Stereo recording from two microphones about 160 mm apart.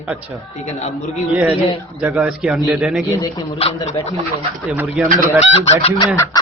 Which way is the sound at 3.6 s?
40° left (ahead or behind).